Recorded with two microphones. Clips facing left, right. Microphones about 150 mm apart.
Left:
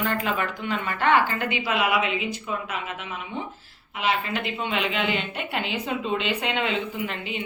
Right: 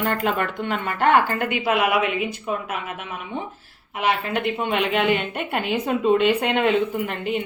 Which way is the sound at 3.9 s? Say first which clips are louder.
Right 3 dB; 55° right (ahead or behind).